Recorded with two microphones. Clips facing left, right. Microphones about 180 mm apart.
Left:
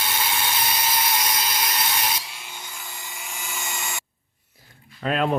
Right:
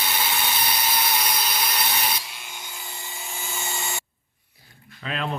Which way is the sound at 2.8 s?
25° right (ahead or behind).